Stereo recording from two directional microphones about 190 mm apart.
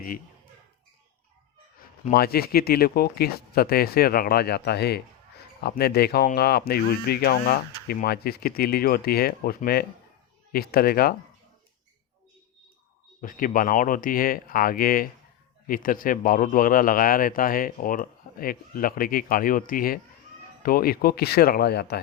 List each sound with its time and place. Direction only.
2.1 s speech: 55° left (ahead or behind)
13.2 s speech: 45° left (ahead or behind)